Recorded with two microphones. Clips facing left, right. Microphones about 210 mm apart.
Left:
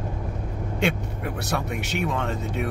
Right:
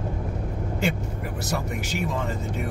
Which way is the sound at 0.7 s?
Centre (ahead or behind).